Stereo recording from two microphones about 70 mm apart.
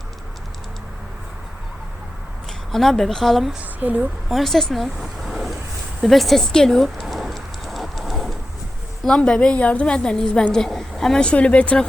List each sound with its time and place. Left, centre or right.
2.7 s speech: centre
3.6 s speech: right
4.3 s speech: centre
6.0 s a sound: centre
9.0 s a woman's voice: centre